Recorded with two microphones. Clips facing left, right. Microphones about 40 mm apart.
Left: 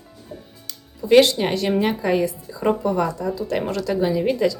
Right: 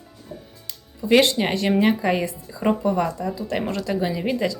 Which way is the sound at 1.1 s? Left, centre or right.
Centre.